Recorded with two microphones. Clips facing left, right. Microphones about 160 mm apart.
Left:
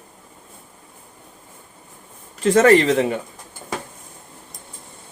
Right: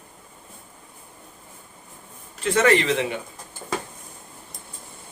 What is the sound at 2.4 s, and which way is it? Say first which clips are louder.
Speech: left 6 dB; 40° left (ahead or behind).